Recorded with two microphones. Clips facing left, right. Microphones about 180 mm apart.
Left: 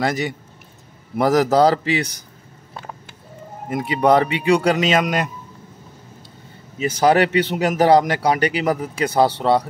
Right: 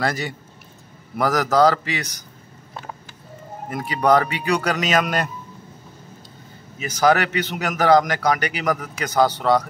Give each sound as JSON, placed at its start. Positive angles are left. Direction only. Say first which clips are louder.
{"t": 0.0, "sound": "speech", "louder": "left 3 dB", "side_deg": 20}
{"t": 3.7, "sound": "speech", "louder": "left 2 dB", "side_deg": 25}
{"t": 6.8, "sound": "speech", "louder": "left 3 dB", "side_deg": 30}